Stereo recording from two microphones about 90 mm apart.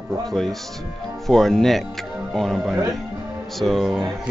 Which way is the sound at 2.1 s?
10° right (ahead or behind).